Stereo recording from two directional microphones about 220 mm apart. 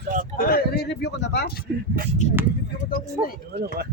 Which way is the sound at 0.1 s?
40° right (ahead or behind).